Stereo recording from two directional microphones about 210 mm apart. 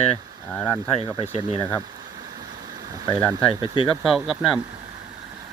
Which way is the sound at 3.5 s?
25° left (ahead or behind).